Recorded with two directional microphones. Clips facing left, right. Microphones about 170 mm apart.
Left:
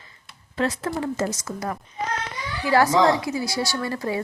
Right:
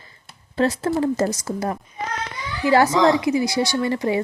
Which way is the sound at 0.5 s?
30° right (ahead or behind).